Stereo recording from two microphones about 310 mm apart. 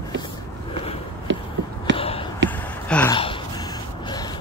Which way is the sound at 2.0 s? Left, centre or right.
Centre.